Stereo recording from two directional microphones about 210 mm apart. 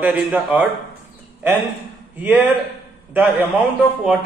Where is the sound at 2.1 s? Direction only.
10° right (ahead or behind).